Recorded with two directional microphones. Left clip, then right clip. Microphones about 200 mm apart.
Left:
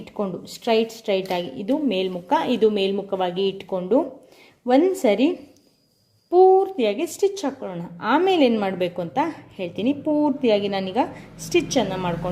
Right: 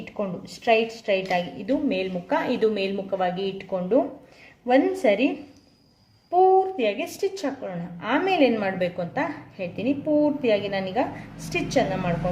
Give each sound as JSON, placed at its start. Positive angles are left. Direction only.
{"t": 0.0, "sound": "a woman's voice", "side_deg": 45}
{"t": 4.7, "sound": "a woman's voice", "side_deg": 45}
{"t": 6.3, "sound": "a woman's voice", "side_deg": 45}